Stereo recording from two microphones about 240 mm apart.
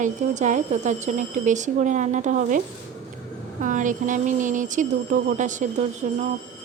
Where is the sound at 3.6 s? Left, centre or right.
Right.